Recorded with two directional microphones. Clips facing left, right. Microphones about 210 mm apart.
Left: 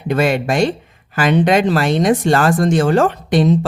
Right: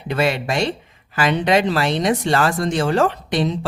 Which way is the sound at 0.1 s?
50° left (ahead or behind).